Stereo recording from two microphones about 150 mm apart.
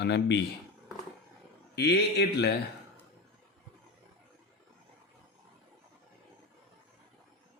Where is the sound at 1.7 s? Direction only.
90° left.